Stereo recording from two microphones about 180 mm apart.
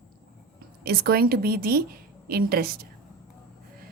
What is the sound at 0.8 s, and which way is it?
A woman's voice, 60° right (ahead or behind).